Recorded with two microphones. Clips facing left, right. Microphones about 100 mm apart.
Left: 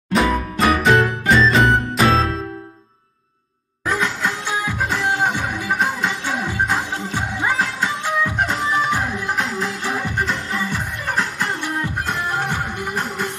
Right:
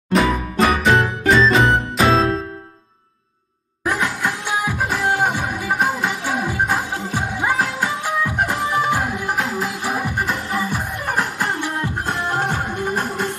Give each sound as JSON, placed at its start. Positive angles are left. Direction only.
{"t": 0.1, "sound": "music", "side_deg": 0}
{"t": 3.8, "sound": "music", "side_deg": -20}